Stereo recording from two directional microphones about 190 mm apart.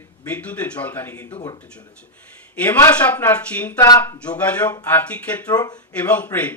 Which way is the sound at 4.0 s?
10° left (ahead or behind).